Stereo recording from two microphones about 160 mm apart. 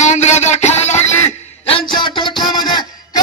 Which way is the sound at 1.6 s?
35° left (ahead or behind).